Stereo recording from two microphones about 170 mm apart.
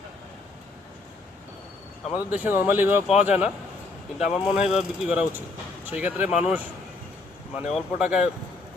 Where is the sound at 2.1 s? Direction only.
10° right (ahead or behind).